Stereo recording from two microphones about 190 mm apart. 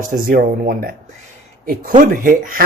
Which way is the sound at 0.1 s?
45° right (ahead or behind).